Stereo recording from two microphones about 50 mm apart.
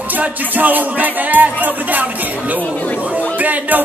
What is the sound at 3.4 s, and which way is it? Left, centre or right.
Music, right.